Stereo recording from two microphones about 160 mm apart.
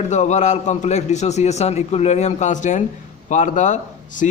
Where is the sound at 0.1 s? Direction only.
50° left (ahead or behind).